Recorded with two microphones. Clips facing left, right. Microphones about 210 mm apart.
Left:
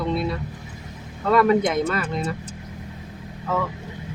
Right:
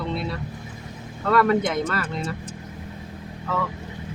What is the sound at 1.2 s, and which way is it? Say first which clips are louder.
Speech: left 2 dB; 15° left (ahead or behind).